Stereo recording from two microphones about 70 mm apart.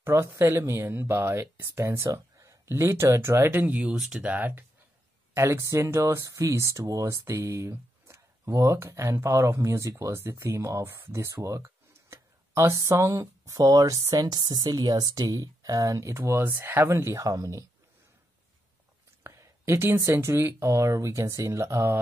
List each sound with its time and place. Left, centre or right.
0.0 s speech: right
3.5 s speech: right
3.9 s speech: centre
4.2 s speech: right
5.3 s speech: right
11.3 s a sound: right
12.7 s speech: right
17.2 s speech: right
19.2 s a sound: right
20.2 s speech: right